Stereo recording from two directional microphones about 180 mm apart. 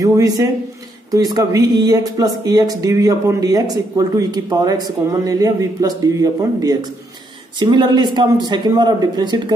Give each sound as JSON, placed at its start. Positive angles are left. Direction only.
{"t": 0.0, "sound": "speech", "side_deg": -20}